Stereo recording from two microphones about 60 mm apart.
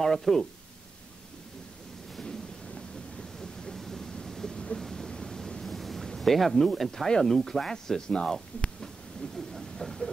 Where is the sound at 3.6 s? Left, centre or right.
Centre.